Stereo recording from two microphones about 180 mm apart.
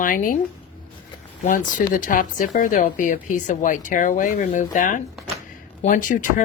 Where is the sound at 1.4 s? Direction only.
45° left (ahead or behind).